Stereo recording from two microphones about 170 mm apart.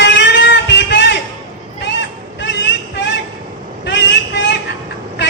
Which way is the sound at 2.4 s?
90° left.